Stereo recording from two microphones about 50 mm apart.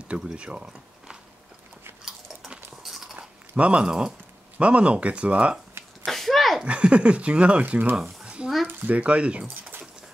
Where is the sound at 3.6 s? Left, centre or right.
Right.